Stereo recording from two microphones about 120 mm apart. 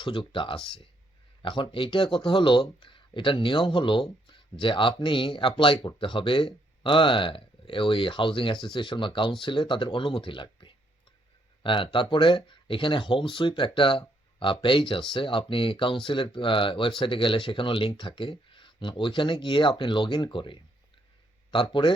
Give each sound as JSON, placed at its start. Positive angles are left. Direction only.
{"t": 0.0, "sound": "speech", "side_deg": 45}